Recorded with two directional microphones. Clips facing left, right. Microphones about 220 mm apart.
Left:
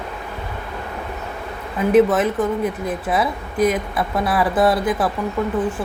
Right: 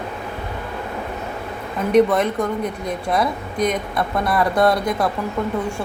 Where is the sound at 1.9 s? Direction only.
5° left (ahead or behind).